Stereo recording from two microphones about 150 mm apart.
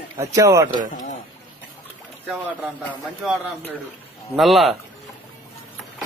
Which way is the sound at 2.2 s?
10° right (ahead or behind).